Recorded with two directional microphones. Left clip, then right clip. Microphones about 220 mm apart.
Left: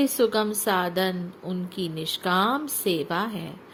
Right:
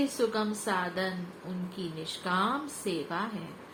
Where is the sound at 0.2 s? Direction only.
45° left (ahead or behind).